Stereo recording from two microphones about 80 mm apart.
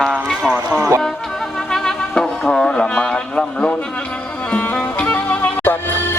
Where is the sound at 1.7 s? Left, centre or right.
Centre.